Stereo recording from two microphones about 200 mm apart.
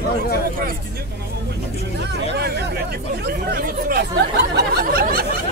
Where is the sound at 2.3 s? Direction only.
55° right (ahead or behind).